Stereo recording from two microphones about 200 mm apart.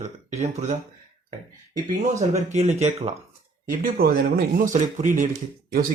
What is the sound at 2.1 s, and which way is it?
Speech, 35° right (ahead or behind).